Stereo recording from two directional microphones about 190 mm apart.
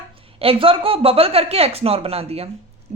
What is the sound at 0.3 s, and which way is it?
A woman's voice, 30° right (ahead or behind).